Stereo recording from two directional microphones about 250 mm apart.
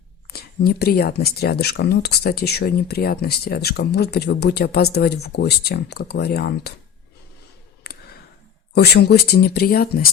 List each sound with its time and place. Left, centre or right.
0.3 s speech: left
7.9 s a sound: left
8.7 s speech: left